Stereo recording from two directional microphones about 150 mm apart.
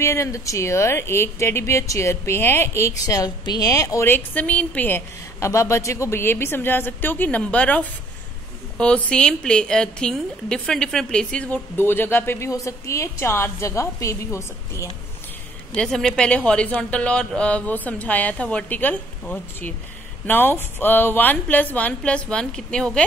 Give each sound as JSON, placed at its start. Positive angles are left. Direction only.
{"t": 0.0, "sound": "speech", "side_deg": 20}
{"t": 15.7, "sound": "speech", "side_deg": 5}